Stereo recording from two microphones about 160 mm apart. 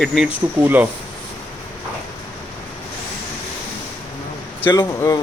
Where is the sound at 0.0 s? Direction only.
Centre (ahead or behind).